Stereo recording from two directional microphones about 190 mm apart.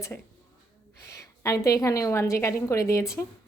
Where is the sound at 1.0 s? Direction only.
15° left (ahead or behind).